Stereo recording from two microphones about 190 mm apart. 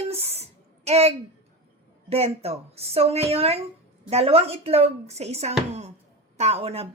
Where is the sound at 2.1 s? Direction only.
35° right (ahead or behind).